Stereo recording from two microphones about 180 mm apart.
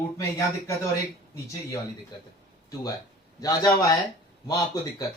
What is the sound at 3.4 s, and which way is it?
Speech, 20° left (ahead or behind).